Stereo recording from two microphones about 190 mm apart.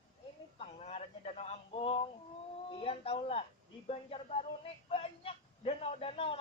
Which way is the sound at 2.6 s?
30° left (ahead or behind).